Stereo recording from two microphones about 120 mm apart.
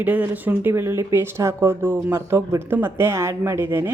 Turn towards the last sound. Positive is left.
turn(degrees=-20)  # may be behind; listen again after turning